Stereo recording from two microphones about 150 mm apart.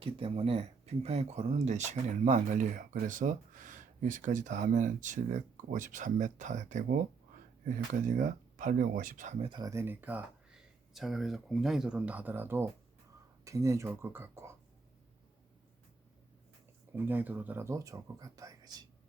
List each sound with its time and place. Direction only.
0.0 s speech: 40° right (ahead or behind); by 9.3 s 60° right (ahead or behind)
9.4 s speech: 30° right (ahead or behind)
9.7 s speech: 15° right (ahead or behind)
16.9 s speech: 15° right (ahead or behind)